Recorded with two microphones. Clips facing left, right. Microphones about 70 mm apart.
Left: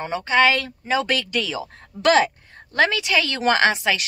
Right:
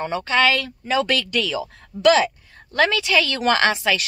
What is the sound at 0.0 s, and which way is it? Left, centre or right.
A woman's voice, left.